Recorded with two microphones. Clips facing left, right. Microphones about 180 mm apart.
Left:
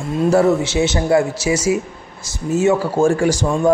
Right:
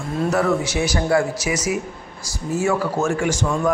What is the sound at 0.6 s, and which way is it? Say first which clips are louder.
A man's voice: left 4 dB; 25° left (ahead or behind).